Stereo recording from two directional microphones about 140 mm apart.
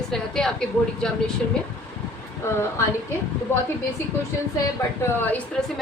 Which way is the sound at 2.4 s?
20° left (ahead or behind).